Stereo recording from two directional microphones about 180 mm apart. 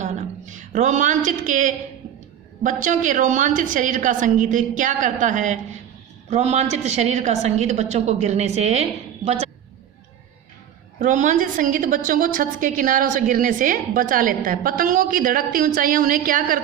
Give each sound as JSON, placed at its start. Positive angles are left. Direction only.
{"t": 0.0, "sound": "a sound", "side_deg": -45}
{"t": 2.8, "sound": "a woman's voice", "side_deg": -45}
{"t": 11.0, "sound": "a woman's voice", "side_deg": -45}